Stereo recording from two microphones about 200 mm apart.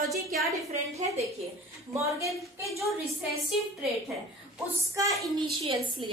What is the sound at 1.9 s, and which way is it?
Speech, 15° right (ahead or behind).